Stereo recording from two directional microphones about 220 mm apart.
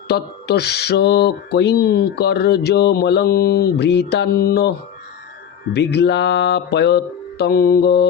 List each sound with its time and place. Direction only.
0.1 s mantra: 50° left (ahead or behind)
5.7 s mantra: 50° left (ahead or behind)